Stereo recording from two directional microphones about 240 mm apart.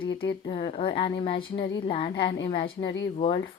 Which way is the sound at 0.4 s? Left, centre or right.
Left.